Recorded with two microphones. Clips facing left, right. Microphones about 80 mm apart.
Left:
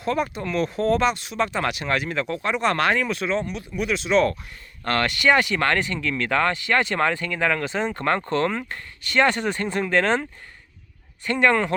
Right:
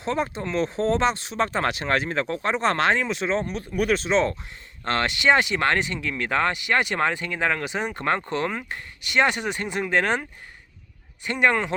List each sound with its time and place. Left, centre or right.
0.0 s speech: right
3.3 s speech: right
4.1 s speech: right